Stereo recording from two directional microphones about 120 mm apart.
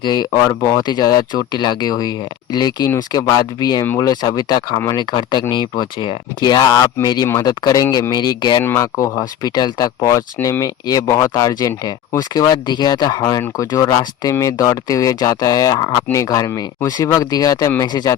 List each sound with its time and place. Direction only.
0.0 s speech: 40° left (ahead or behind)
8.6 s speech: 20° left (ahead or behind)